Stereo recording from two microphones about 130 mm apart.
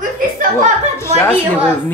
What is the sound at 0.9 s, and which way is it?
Speech, 20° left (ahead or behind).